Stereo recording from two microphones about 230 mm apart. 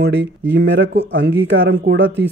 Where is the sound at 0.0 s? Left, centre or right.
Right.